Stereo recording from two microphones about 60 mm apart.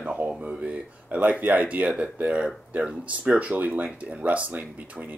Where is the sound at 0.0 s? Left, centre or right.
Right.